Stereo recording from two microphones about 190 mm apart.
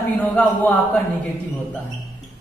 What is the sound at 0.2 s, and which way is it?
Speech, 10° left (ahead or behind).